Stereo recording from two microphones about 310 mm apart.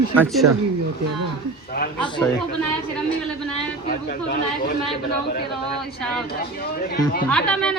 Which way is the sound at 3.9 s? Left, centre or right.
Left.